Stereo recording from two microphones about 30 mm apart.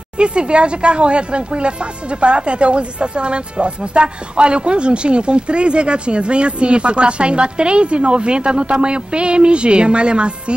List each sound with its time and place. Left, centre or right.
0.2 s speech: right